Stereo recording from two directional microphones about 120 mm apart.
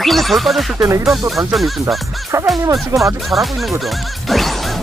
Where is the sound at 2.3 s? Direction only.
25° right (ahead or behind).